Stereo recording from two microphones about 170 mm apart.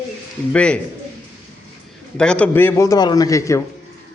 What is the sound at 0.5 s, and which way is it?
Speech, 5° left (ahead or behind).